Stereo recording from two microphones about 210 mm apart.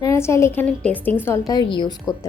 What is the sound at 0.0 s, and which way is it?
A woman's voice, 15° left (ahead or behind).